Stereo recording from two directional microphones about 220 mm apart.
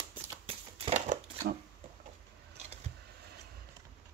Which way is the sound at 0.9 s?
30° right (ahead or behind).